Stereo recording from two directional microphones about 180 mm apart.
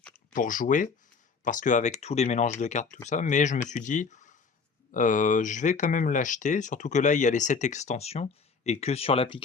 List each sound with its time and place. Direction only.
0.3 s speech: 50° left (ahead or behind); by 9.4 s 30° left (ahead or behind)